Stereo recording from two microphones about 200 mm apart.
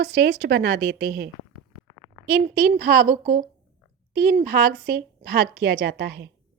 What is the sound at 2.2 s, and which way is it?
A woman's voice, 45° right (ahead or behind).